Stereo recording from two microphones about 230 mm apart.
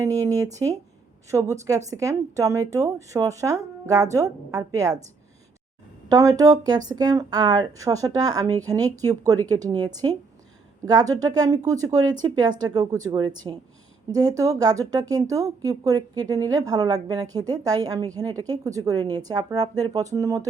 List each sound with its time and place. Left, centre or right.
0.0 s a woman's voice: centre
6.1 s a woman's voice: centre